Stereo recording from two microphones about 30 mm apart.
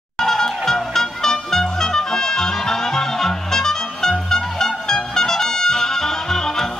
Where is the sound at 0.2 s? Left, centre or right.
Centre.